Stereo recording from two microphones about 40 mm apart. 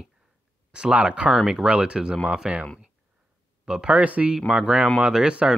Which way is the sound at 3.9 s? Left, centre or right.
Right.